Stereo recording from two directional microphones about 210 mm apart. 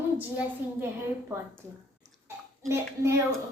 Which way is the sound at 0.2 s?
10° right (ahead or behind).